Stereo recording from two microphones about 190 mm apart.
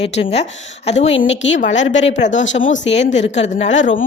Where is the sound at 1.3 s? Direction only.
75° left (ahead or behind).